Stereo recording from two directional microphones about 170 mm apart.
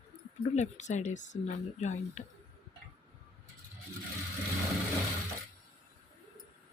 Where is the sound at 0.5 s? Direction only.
45° left (ahead or behind).